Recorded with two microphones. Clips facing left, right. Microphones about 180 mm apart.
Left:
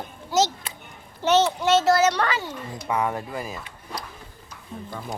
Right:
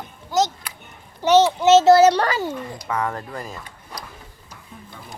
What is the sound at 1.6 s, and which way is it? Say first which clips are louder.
A child's voice: right 7 dB; 25° right (ahead or behind).